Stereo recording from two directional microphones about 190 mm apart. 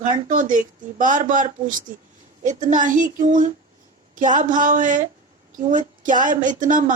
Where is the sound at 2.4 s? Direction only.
40° right (ahead or behind).